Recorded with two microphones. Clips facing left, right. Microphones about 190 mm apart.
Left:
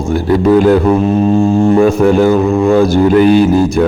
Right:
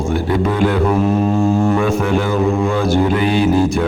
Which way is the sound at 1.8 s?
40° left (ahead or behind).